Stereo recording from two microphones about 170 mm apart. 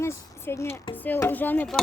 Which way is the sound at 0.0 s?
15° left (ahead or behind).